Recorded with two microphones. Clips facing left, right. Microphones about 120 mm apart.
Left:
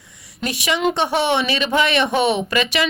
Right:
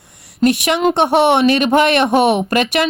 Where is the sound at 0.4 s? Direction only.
55° right (ahead or behind).